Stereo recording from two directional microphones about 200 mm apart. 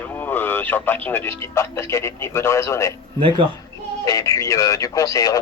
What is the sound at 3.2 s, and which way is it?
Speech, 25° right (ahead or behind).